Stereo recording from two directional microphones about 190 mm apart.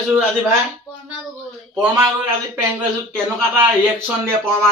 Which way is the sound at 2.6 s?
10° right (ahead or behind).